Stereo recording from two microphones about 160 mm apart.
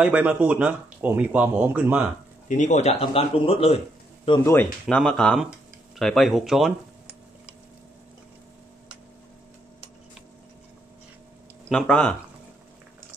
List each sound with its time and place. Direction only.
0.0 s speech: 10° right (ahead or behind)
2.4 s speech: 50° left (ahead or behind)
4.8 s speech: 5° left (ahead or behind)
11.7 s speech: 5° left (ahead or behind)